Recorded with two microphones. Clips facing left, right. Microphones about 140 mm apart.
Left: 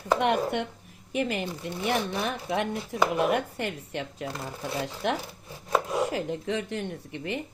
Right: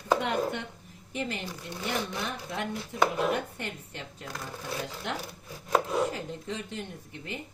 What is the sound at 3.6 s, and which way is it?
Speech, 90° left.